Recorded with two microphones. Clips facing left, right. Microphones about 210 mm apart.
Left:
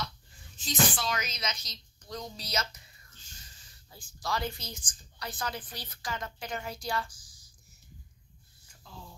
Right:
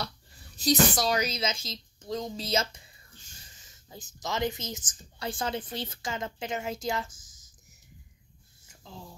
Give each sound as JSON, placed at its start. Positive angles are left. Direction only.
{"t": 0.6, "sound": "speech", "side_deg": -40}
{"t": 3.9, "sound": "speech", "side_deg": -20}